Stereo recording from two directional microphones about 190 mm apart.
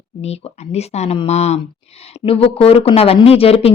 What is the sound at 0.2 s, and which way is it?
A woman's voice, 35° left (ahead or behind).